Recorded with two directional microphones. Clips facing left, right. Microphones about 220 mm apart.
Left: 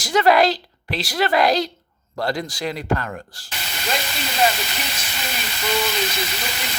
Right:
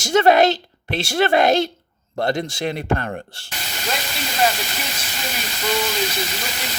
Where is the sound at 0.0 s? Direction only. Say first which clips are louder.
Right 2 dB; 25° right (ahead or behind).